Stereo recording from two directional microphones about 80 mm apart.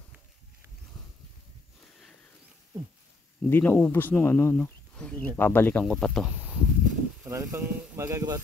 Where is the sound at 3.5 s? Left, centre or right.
Left.